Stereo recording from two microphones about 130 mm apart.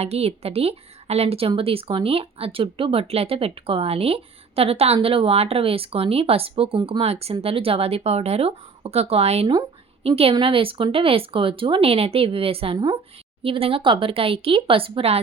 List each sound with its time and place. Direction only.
0.0 s a woman's voice: 50° right (ahead or behind); by 13.0 s 35° right (ahead or behind)
13.4 s a woman's voice: 45° right (ahead or behind)